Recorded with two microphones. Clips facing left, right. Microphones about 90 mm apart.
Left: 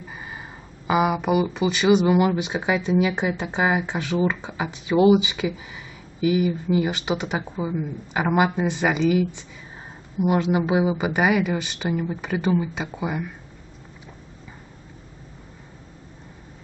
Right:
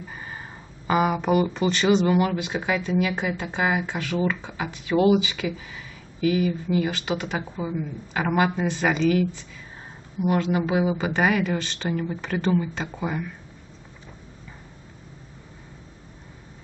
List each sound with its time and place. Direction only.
0.1 s speech: 5° left (ahead or behind)